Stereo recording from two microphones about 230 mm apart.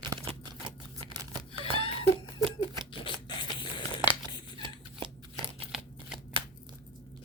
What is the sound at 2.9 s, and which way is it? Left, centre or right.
Zipper, left.